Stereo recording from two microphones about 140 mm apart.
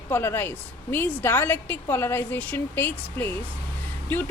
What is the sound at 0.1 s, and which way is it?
A woman's voice, 15° left (ahead or behind).